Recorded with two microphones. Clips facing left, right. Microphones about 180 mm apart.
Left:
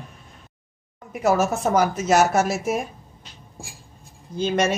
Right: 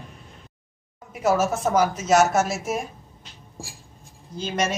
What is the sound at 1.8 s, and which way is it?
Speech, 60° left (ahead or behind).